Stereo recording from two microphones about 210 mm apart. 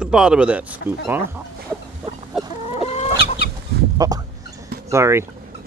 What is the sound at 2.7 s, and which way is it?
Chicken, 30° left (ahead or behind).